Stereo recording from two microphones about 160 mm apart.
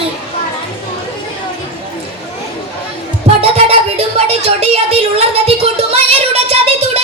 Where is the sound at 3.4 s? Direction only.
40° right (ahead or behind).